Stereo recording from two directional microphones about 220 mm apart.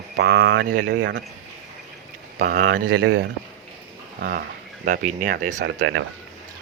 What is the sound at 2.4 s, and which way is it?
Speech, 40° right (ahead or behind).